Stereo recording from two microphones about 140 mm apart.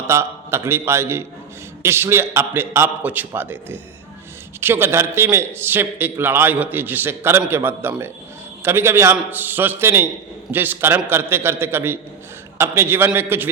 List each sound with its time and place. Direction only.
0.1 s a man's voice: 20° right (ahead or behind)